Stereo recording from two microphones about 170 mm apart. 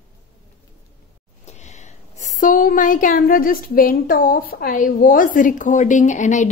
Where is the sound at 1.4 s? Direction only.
40° left (ahead or behind).